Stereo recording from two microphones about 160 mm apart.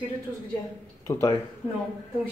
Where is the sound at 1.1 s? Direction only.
15° left (ahead or behind).